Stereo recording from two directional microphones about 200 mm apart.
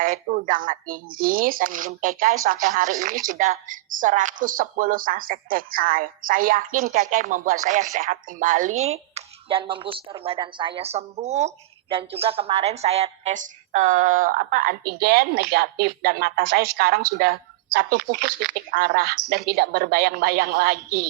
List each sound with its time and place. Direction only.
0.0 s a woman's voice: 45° right (ahead or behind)